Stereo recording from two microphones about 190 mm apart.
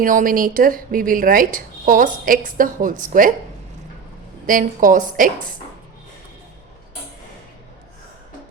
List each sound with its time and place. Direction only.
0.0 s a woman's voice: 45° right (ahead or behind)
4.4 s a woman's voice: 45° right (ahead or behind)